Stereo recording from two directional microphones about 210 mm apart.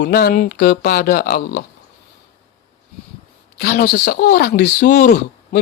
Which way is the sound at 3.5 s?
45° left (ahead or behind).